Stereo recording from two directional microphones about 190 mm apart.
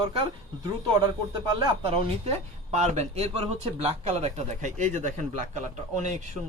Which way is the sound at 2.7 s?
40° right (ahead or behind).